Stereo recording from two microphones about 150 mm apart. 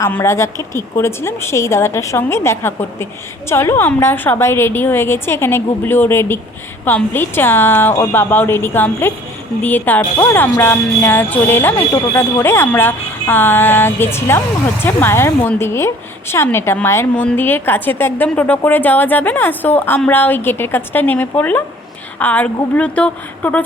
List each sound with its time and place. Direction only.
0.0 s a woman's voice: 15° left (ahead or behind)